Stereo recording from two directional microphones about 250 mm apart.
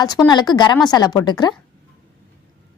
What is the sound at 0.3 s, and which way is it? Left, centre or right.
A woman's voice, centre.